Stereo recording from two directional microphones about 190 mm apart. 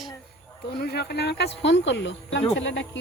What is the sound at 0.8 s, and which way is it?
Speech, 55° left (ahead or behind).